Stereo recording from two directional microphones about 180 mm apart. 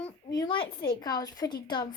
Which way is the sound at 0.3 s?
25° left (ahead or behind).